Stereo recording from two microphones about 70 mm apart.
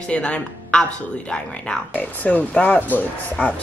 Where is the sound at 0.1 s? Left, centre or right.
Centre.